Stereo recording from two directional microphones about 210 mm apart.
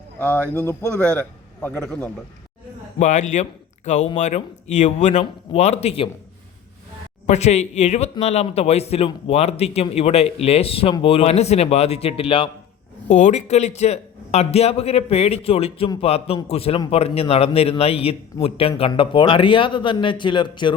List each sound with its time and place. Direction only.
0.2 s a man's voice: 10° left (ahead or behind)
3.0 s a man's voice: 35° left (ahead or behind)
7.3 s a man's voice: 30° left (ahead or behind)